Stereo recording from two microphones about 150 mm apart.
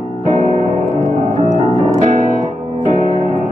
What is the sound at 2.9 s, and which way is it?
Music, 55° right (ahead or behind).